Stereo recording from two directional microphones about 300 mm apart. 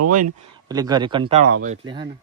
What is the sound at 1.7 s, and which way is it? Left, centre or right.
Speech, centre.